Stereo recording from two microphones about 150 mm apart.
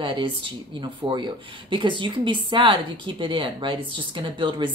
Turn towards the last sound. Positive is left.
turn(degrees=-30)  # may be behind; listen again after turning